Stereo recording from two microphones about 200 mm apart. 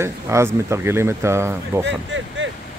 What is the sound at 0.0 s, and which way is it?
Speech, 15° right (ahead or behind).